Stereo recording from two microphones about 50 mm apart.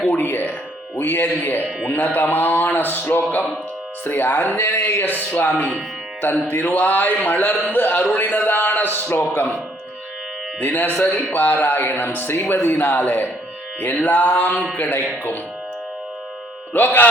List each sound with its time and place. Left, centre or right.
0.0 s speech: left
10.6 s speech: left
16.7 s speech: left